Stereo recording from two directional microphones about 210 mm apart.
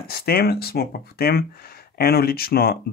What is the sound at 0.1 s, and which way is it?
Speech, 45° left (ahead or behind).